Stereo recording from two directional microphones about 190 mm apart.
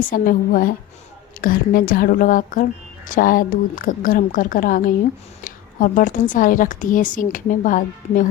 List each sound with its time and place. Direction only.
0.1 s speech: 45° left (ahead or behind)